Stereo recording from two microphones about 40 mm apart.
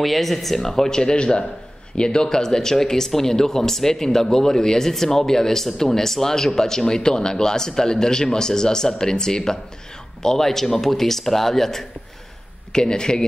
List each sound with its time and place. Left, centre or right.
0.0 s speech: centre
12.7 s speech: centre